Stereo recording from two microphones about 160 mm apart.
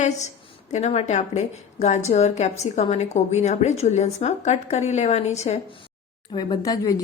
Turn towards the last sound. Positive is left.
turn(degrees=20)  # may be behind; listen again after turning